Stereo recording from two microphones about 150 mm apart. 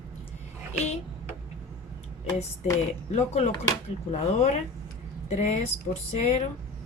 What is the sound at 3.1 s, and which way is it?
A woman's voice, 45° left (ahead or behind).